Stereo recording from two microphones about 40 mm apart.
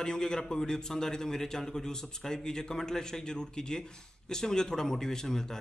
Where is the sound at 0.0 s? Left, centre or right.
Centre.